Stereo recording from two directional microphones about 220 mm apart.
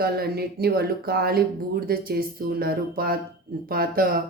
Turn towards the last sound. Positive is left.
turn(degrees=-40)  # may be behind; listen again after turning